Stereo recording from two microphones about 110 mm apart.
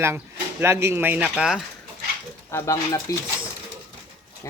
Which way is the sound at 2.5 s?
25° left (ahead or behind).